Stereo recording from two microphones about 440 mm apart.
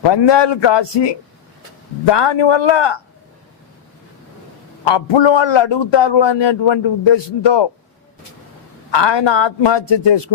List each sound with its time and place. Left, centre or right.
0.0 s a man's voice: left
4.9 s a man's voice: left
8.9 s a man's voice: left